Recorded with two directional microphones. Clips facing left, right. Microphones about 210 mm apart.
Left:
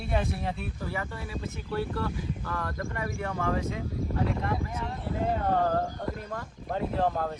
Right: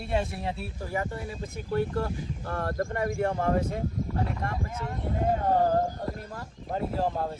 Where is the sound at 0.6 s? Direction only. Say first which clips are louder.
Right 2 dB; 40° right (ahead or behind).